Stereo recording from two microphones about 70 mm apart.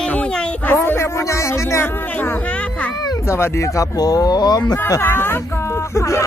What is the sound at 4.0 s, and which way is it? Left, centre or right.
Speech, left.